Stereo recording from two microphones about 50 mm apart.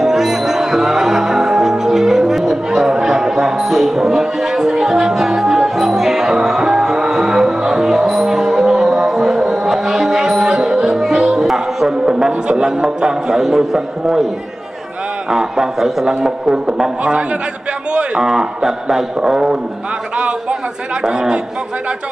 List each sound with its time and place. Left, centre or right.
0.0 s music: centre
12.3 s a man's voice: centre
15.2 s a man's voice: centre
18.2 s a man's voice: centre
20.2 s a sound: right
21.0 s a man's voice: centre